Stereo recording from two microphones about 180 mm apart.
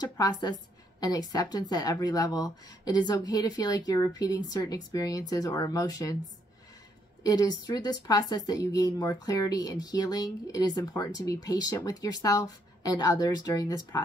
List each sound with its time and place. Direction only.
0.0 s speech: 20° left (ahead or behind)
7.2 s speech: 20° left (ahead or behind)